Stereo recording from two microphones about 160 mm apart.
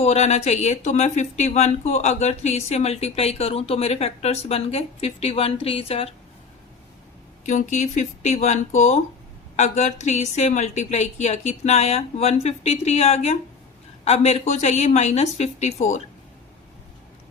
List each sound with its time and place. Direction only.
0.0 s speech: 45° left (ahead or behind)
7.4 s a woman's voice: 50° left (ahead or behind)